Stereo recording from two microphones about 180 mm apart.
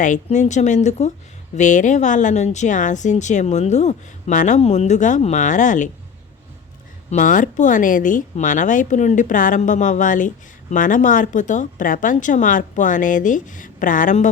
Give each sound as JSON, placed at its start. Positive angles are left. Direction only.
{"t": 0.0, "sound": "a woman's voice", "side_deg": 40}
{"t": 7.1, "sound": "speech", "side_deg": 45}